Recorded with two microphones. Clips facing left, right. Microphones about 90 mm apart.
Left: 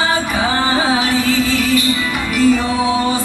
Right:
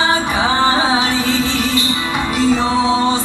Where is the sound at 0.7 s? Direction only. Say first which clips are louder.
Even; 25° right (ahead or behind).